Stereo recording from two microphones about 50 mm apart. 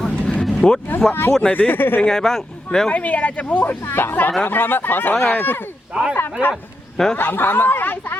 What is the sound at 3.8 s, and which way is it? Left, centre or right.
Speech, left.